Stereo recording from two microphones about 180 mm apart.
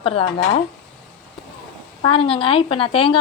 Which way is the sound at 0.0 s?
30° left (ahead or behind).